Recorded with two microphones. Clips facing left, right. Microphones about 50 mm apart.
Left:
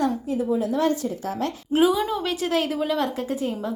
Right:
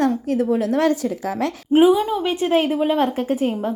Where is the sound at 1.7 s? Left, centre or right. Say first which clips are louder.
Right 6 dB; right.